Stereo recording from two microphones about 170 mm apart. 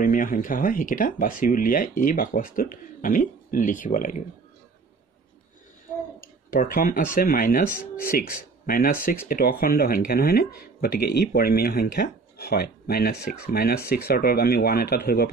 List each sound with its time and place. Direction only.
0.0 s speech: 55° left (ahead or behind)
6.2 s speech: 55° left (ahead or behind)